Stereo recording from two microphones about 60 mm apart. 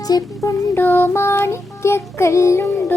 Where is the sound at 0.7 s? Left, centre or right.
Left.